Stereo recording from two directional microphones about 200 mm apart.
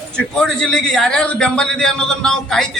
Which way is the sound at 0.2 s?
5° left (ahead or behind).